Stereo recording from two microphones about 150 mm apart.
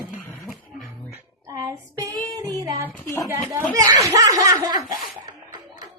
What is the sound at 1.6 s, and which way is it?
Child singing, 20° right (ahead or behind).